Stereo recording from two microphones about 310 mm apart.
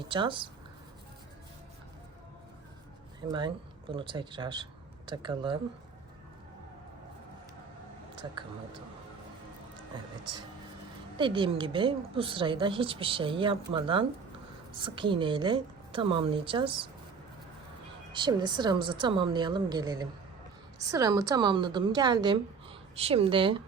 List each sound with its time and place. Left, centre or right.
0.1 s a woman's voice: centre
3.3 s speech: centre
11.2 s a woman's voice: centre
18.1 s a woman's voice: centre